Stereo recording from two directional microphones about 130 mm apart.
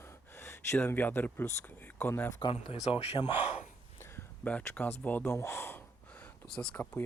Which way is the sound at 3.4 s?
55° left (ahead or behind).